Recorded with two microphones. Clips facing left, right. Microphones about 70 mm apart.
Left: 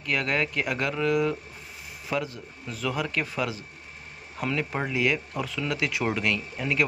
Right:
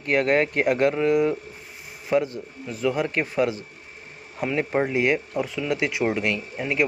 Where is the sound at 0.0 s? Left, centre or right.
Right.